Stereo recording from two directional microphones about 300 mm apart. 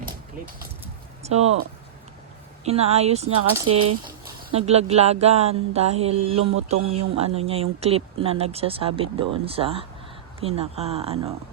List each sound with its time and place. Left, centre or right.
0.0 s a sound: right
1.2 s speech: right
2.6 s speech: right